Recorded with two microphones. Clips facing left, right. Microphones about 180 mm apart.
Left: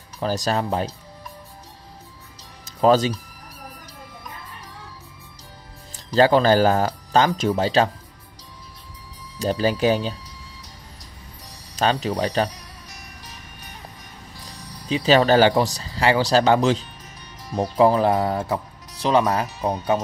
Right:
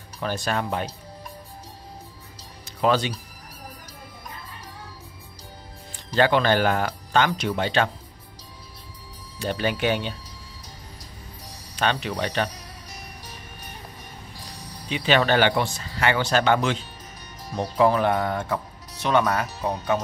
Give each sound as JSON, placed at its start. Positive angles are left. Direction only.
{"t": 0.2, "sound": "speech", "side_deg": 35}
{"t": 6.1, "sound": "speech", "side_deg": 35}
{"t": 9.4, "sound": "speech", "side_deg": 35}
{"t": 11.7, "sound": "speech", "side_deg": 35}
{"t": 14.9, "sound": "speech", "side_deg": 35}